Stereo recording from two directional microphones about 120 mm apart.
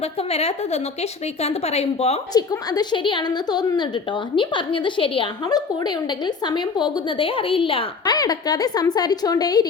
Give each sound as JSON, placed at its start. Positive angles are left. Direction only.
{"t": 0.0, "sound": "speech", "side_deg": 60}
{"t": 2.3, "sound": "a woman's voice", "side_deg": 35}
{"t": 8.0, "sound": "a woman's voice", "side_deg": 35}